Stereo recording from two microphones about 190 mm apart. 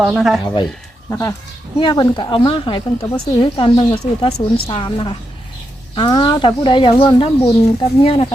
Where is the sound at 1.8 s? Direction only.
25° left (ahead or behind).